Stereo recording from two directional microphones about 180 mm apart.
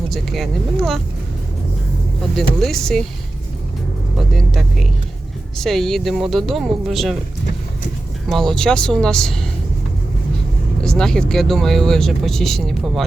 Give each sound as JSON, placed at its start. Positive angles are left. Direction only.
{"t": 0.1, "sound": "speech", "side_deg": 0}
{"t": 2.3, "sound": "speech", "side_deg": 0}
{"t": 4.4, "sound": "speech", "side_deg": 0}
{"t": 8.3, "sound": "speech", "side_deg": 0}
{"t": 10.8, "sound": "speech", "side_deg": 5}